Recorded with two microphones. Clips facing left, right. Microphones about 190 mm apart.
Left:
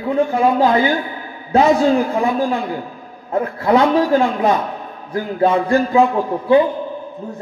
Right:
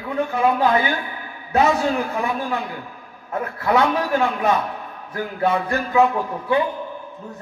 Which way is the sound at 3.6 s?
30° left (ahead or behind).